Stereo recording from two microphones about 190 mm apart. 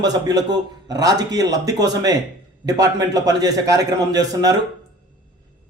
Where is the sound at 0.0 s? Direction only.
20° right (ahead or behind).